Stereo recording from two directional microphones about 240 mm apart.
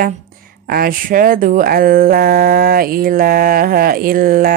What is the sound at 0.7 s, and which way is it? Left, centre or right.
Speech, right.